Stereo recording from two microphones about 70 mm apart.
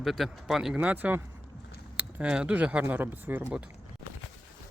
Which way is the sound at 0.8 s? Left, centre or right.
Right.